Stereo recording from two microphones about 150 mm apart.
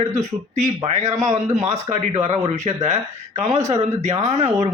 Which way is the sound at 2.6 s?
45° right (ahead or behind).